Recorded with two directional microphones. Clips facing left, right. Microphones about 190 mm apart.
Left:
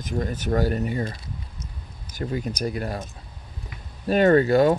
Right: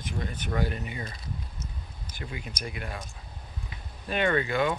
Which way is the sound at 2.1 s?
40° left (ahead or behind).